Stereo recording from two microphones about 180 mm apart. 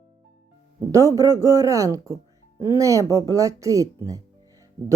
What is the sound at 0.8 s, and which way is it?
Speech, 15° right (ahead or behind).